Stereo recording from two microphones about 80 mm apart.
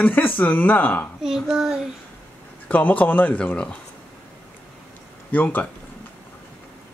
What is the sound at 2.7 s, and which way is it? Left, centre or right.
Speech, left.